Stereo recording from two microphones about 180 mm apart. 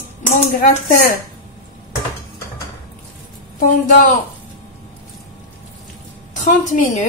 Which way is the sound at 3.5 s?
45° left (ahead or behind).